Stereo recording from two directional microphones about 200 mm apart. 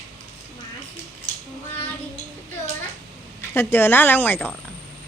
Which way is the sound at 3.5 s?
10° left (ahead or behind).